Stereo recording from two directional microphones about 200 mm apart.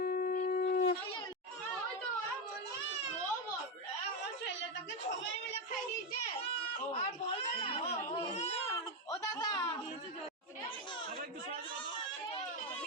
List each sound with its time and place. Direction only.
0.0 s shofar: 45° left (ahead or behind)
6.9 s baby cry: 30° left (ahead or behind)
9.2 s a sound: 20° left (ahead or behind)